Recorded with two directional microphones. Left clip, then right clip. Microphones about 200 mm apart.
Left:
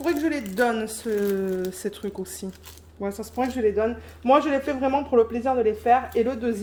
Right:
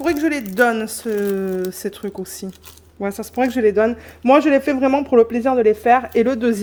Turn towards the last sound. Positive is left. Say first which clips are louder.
# right 7 dB
turn(degrees=-65)  # may be behind; listen again after turning